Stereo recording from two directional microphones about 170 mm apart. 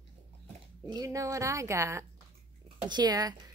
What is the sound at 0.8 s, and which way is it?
Speech, 20° right (ahead or behind).